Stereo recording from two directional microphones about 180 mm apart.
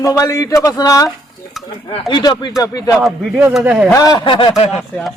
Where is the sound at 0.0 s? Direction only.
20° left (ahead or behind).